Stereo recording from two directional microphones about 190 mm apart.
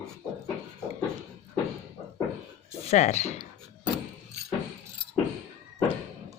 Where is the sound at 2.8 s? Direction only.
35° left (ahead or behind).